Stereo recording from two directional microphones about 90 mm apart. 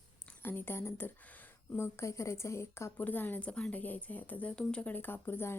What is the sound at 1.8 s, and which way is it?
Speech, 30° left (ahead or behind).